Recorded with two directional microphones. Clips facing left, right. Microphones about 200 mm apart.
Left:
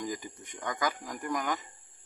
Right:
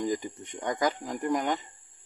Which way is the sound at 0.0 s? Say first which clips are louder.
Right 7 dB; 30° right (ahead or behind).